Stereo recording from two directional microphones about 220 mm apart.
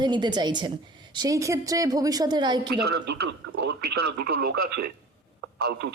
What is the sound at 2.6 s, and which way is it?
Speech, 50° right (ahead or behind).